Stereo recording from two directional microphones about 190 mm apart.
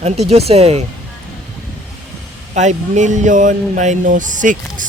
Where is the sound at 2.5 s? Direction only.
40° right (ahead or behind).